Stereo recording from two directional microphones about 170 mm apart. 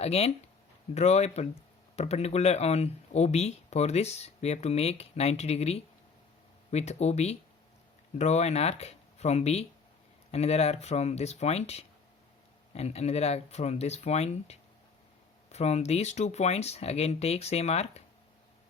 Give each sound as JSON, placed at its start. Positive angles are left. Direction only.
{"t": 0.0, "sound": "speech", "side_deg": 35}